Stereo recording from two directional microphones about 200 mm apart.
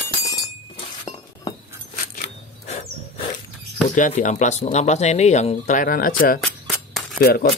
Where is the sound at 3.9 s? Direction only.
40° left (ahead or behind).